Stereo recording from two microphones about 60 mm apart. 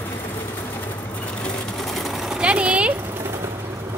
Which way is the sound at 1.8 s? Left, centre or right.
Centre.